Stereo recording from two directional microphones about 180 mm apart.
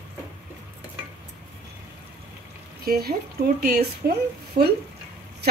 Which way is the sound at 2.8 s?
60° right (ahead or behind).